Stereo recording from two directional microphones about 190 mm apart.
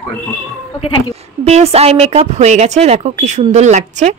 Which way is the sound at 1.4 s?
35° right (ahead or behind).